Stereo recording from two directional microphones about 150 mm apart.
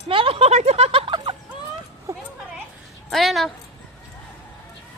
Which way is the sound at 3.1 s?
Centre (ahead or behind).